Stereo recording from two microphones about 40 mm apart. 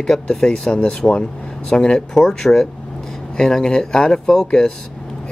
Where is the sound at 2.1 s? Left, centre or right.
Centre.